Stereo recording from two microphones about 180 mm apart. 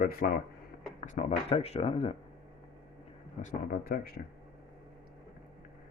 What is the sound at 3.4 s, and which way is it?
Speech, 50° left (ahead or behind).